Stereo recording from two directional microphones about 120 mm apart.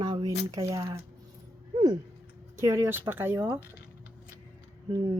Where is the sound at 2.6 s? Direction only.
25° right (ahead or behind).